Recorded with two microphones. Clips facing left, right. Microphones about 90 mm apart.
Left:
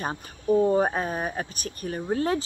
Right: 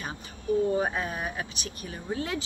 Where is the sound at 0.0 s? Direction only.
40° left (ahead or behind).